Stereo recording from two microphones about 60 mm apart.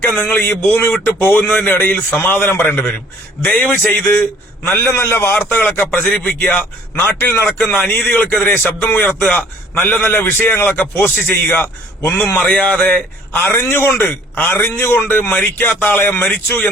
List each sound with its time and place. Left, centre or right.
0.3 s speech: left
0.5 s a man's voice: left
4.8 s a man's voice: left
5.9 s a man's voice: left
7.7 s a man's voice: left
12.4 s speech: centre
13.3 s a man's voice: left